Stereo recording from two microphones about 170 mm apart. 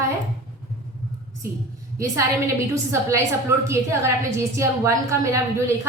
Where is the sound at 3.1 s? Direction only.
15° right (ahead or behind).